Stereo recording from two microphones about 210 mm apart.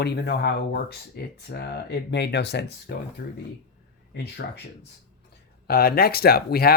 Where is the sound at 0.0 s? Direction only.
55° left (ahead or behind).